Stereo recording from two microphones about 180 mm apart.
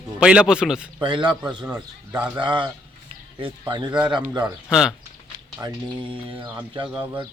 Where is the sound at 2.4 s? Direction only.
25° right (ahead or behind).